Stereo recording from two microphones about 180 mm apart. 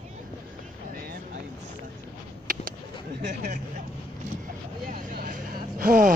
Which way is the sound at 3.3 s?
45° right (ahead or behind).